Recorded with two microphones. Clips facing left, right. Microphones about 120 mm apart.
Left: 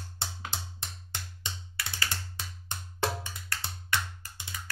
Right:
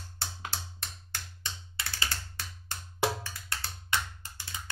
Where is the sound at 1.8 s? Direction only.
25° right (ahead or behind).